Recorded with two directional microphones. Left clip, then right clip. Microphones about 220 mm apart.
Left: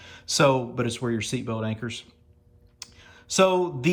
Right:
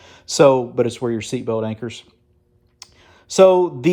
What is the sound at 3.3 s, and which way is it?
Speech, 20° right (ahead or behind).